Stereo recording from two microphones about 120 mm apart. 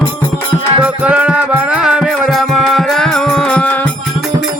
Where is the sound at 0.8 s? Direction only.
10° right (ahead or behind); by 3.9 s 10° left (ahead or behind).